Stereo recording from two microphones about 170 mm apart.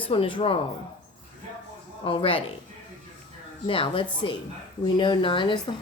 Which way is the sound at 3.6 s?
30° left (ahead or behind).